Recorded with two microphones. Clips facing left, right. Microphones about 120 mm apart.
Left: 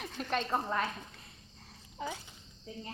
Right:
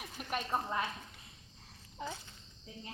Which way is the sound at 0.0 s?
10° right (ahead or behind).